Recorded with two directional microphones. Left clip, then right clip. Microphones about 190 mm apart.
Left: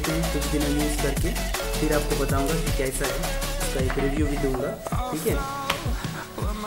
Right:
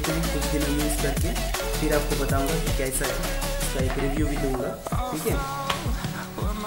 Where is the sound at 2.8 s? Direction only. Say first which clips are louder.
Left 1 dB; centre (ahead or behind).